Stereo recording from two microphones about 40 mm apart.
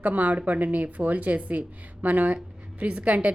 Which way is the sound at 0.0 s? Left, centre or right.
Right.